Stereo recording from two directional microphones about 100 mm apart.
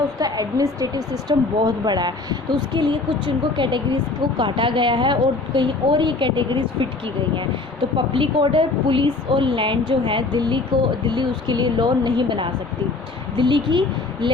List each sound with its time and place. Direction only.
0.2 s speech: 40° right (ahead or behind)